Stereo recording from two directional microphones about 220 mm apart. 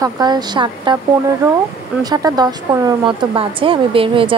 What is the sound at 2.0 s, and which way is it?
Speech, 15° right (ahead or behind).